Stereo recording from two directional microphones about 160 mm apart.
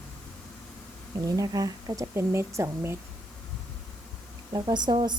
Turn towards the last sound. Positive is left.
turn(degrees=-25)  # may be behind; listen again after turning